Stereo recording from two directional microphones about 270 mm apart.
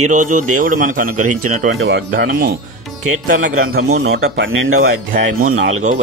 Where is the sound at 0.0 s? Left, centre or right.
Right.